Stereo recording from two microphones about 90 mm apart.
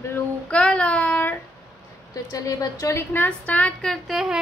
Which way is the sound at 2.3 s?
40° left (ahead or behind).